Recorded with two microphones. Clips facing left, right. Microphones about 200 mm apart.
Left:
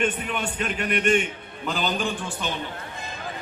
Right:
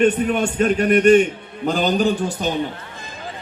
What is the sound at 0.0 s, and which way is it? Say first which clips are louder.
A man's voice: right 10 dB; 40° right (ahead or behind).